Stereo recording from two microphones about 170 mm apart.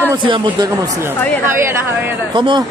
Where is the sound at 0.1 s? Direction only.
25° right (ahead or behind).